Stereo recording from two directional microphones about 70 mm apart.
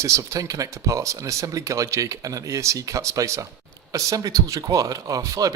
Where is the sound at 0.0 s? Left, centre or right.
Right.